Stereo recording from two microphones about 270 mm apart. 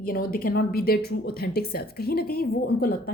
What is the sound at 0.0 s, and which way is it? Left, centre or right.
Speech, left.